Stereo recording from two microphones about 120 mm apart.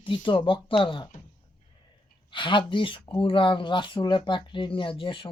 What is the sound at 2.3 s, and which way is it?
Speech, 40° left (ahead or behind).